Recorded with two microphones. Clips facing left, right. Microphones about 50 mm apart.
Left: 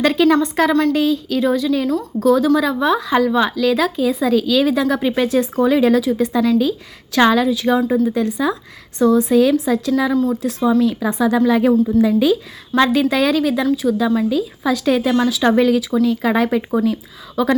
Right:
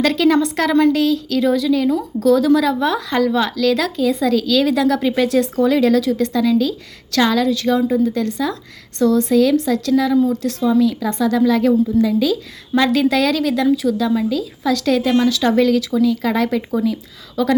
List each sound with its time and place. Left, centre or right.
0.0 s speech: centre
7.4 s speech: centre
12.9 s speech: centre